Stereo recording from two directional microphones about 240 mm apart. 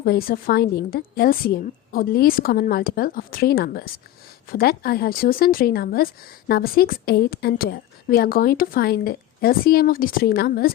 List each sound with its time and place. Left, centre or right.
0.0 s a woman's voice: left